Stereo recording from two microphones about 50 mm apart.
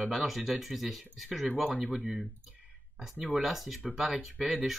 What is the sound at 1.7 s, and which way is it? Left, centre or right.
Speech, right.